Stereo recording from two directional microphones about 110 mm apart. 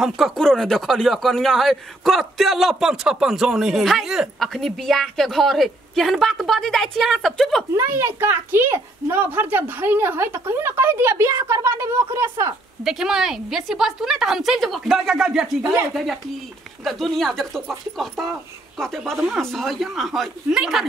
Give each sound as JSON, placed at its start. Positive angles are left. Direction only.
{"t": 0.0, "sound": "a man's voice", "side_deg": 0}
{"t": 7.7, "sound": "a child's voice", "side_deg": -25}
{"t": 12.8, "sound": "a man's voice", "side_deg": -5}
{"t": 16.8, "sound": "a man's voice", "side_deg": 5}